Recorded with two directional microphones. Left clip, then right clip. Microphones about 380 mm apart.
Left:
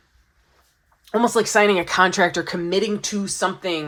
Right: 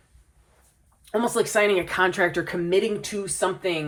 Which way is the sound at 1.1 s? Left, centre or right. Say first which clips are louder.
Left 5 dB; left.